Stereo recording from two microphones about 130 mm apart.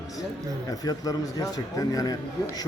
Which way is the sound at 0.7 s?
30° left (ahead or behind).